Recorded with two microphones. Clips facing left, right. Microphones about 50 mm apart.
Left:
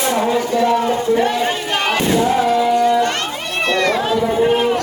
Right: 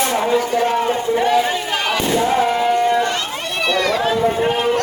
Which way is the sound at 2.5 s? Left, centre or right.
Right.